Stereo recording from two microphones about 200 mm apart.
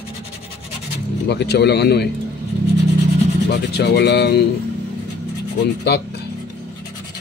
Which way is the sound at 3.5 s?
55° left (ahead or behind).